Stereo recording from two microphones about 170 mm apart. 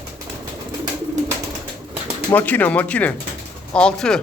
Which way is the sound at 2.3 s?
10° left (ahead or behind).